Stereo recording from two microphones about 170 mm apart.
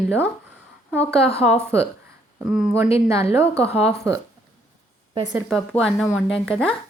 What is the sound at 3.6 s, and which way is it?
Speech, 35° left (ahead or behind).